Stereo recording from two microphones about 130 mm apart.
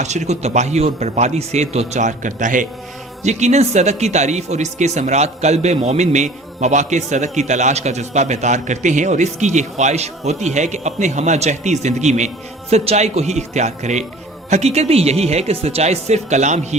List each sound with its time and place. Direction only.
0.0 s speech: 60° right (ahead or behind); by 2.6 s 80° right
3.2 s speech: 60° right (ahead or behind)